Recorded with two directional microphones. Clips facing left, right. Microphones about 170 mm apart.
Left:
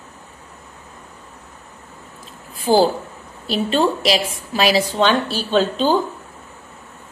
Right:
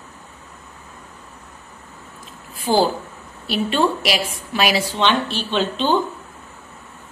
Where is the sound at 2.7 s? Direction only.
45° left (ahead or behind).